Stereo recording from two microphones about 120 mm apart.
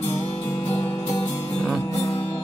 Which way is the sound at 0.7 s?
20° left (ahead or behind).